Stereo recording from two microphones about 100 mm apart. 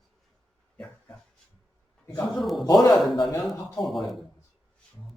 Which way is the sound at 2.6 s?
45° left (ahead or behind).